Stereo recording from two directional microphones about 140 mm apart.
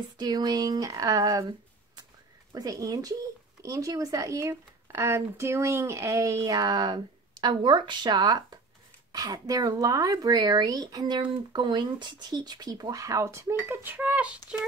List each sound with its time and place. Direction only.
0.2 s a woman's voice: 30° right (ahead or behind)
2.5 s a woman's voice: 25° right (ahead or behind); by 14.3 s 10° right (ahead or behind)